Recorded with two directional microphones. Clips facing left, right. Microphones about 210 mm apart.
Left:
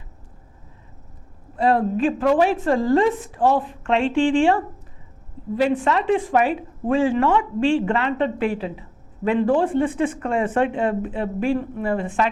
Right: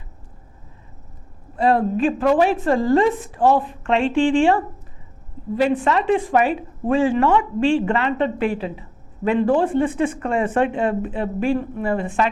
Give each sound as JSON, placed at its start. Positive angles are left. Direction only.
{"t": 1.5, "sound": "a woman's voice", "side_deg": -15}